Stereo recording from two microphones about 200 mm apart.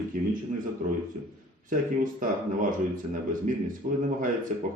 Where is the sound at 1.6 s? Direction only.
40° right (ahead or behind).